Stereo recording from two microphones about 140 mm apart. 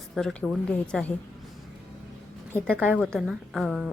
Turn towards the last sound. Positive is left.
turn(degrees=0)  # may be behind; listen again after turning